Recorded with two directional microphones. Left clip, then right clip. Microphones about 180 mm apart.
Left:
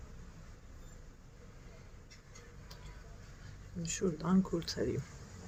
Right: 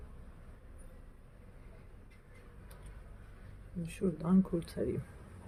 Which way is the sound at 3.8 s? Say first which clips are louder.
Left 1 dB; centre (ahead or behind).